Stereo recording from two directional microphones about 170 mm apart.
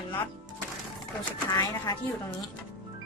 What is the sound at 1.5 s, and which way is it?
Speech, 20° left (ahead or behind).